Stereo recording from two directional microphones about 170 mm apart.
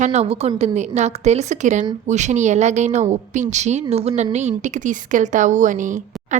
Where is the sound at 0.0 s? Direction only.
40° right (ahead or behind).